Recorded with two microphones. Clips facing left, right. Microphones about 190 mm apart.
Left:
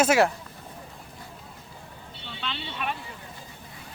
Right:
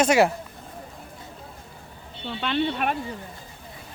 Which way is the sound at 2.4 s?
55° right (ahead or behind).